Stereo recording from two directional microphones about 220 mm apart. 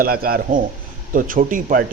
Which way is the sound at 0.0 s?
40° right (ahead or behind).